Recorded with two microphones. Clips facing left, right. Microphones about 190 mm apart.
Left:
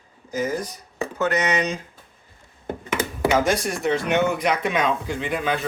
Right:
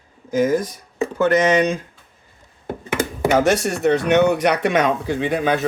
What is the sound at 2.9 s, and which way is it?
Speech, 60° right (ahead or behind).